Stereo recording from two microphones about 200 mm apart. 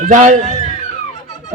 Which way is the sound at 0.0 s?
40° right (ahead or behind).